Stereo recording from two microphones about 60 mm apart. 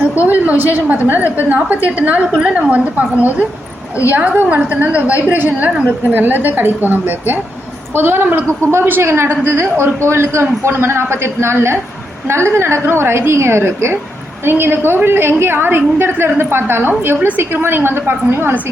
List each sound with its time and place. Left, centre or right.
0.3 s a woman's voice: right
4.1 s a woman's voice: right